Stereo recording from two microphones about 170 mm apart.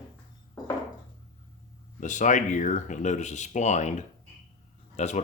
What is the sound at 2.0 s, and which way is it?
Speech, 45° left (ahead or behind).